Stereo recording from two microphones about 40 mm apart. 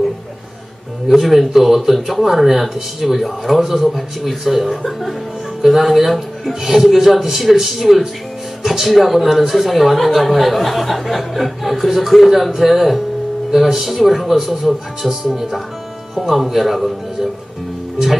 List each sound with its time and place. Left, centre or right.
1.0 s speech: centre